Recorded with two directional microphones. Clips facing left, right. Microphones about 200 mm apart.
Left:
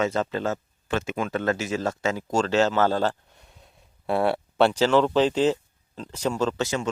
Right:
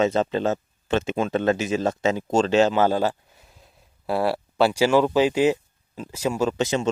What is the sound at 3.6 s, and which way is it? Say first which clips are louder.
Speech: even; centre (ahead or behind).